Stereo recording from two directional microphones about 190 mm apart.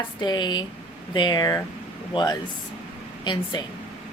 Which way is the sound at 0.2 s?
25° left (ahead or behind).